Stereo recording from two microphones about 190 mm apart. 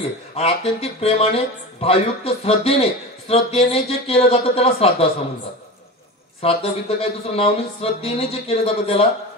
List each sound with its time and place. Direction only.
0.4 s speech: 30° left (ahead or behind)
6.4 s speech: 30° left (ahead or behind)